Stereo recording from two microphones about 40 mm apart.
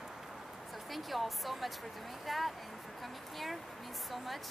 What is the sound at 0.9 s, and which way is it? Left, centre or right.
Speech, centre.